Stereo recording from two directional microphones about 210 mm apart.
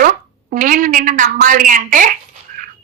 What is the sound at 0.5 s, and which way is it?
Speech, 40° right (ahead or behind).